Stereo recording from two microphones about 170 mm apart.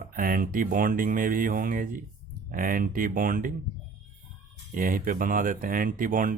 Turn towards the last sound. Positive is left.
turn(degrees=-55)  # may be behind; listen again after turning